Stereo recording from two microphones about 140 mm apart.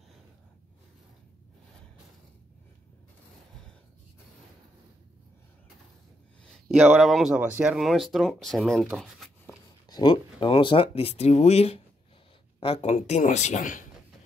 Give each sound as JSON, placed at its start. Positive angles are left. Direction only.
{"t": 6.7, "sound": "speech", "side_deg": -10}
{"t": 9.8, "sound": "speech", "side_deg": 30}